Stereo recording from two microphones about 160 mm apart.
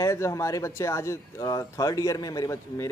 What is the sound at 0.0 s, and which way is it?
Speech, 20° left (ahead or behind).